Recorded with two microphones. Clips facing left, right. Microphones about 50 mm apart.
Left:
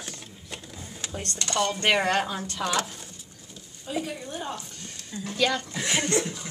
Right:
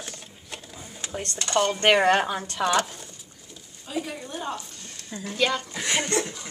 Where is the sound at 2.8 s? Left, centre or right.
Centre.